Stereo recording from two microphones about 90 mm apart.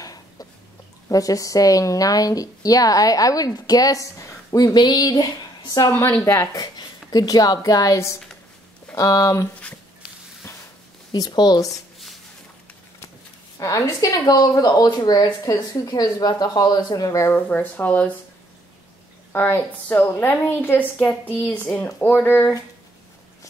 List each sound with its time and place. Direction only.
0.0 s a sound: 45° left (ahead or behind)
1.0 s a woman's voice: 40° left (ahead or behind)
5.6 s a sound: 55° left (ahead or behind)
5.9 s a woman's voice: 35° left (ahead or behind)
6.5 s a woman's voice: 45° left (ahead or behind)
11.1 s a woman's voice: 50° left (ahead or behind)
13.6 s a woman's voice: 35° left (ahead or behind)
17.3 s speech: 20° left (ahead or behind)
19.3 s a woman's voice: 20° left (ahead or behind)